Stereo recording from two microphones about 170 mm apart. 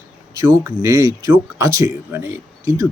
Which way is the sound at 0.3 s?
15° right (ahead or behind).